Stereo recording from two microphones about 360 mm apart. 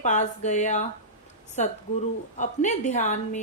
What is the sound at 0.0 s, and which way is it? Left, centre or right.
A woman's voice, centre.